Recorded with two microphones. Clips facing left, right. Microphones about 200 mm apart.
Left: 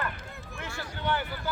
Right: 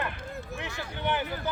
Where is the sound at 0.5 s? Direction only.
20° right (ahead or behind).